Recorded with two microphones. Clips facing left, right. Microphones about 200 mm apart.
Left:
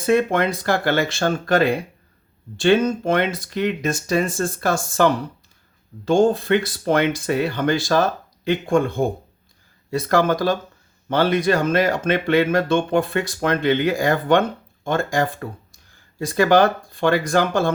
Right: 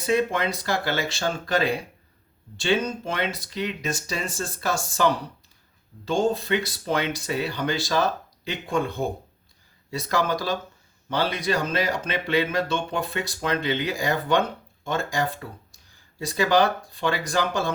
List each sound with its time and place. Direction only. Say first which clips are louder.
0.0 s speech: left 5 dB; 55° left (ahead or behind)